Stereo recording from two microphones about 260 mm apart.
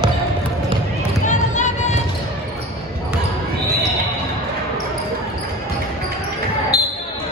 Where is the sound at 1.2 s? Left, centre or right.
Left.